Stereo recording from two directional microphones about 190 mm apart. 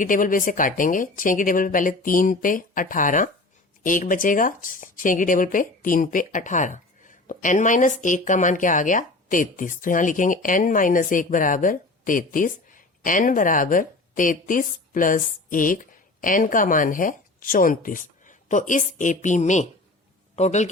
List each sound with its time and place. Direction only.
0.0 s a woman's voice: 45° left (ahead or behind)